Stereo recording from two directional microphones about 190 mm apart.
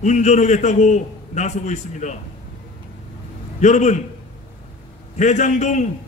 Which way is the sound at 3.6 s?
40° left (ahead or behind).